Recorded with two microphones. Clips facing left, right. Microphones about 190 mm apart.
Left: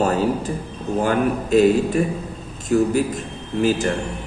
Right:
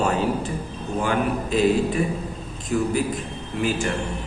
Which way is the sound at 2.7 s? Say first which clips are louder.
Left 5 dB; 45° left (ahead or behind).